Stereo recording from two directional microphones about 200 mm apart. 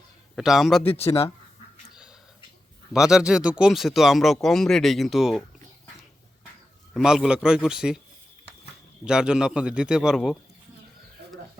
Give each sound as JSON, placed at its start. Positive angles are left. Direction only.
{"t": 0.3, "sound": "speech", "side_deg": 0}
{"t": 0.9, "sound": "speech", "side_deg": 30}
{"t": 2.9, "sound": "speech", "side_deg": -5}
{"t": 6.9, "sound": "speech", "side_deg": -5}
{"t": 9.0, "sound": "speech", "side_deg": -5}
{"t": 11.2, "sound": "a sound", "side_deg": -55}